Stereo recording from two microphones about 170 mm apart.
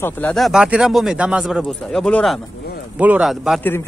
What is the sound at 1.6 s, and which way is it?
Speech, 5° left (ahead or behind).